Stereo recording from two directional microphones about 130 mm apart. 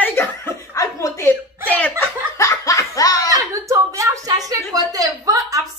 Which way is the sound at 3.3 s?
25° right (ahead or behind).